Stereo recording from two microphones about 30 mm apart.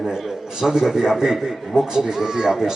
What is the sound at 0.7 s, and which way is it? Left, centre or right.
A man's voice, centre.